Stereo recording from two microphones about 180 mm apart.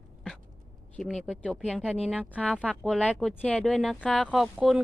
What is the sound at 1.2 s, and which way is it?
Speech, 5° left (ahead or behind).